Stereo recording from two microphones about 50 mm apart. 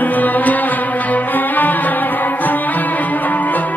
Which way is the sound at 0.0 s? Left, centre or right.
Left.